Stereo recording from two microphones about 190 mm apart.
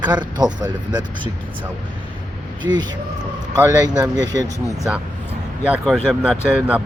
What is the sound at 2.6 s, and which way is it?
A man's voice, 25° right (ahead or behind).